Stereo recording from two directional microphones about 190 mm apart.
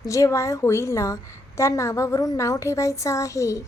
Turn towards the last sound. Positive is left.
turn(degrees=15)  # may be behind; listen again after turning